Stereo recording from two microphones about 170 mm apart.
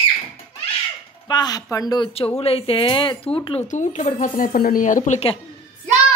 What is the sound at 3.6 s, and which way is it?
Speech, 45° left (ahead or behind).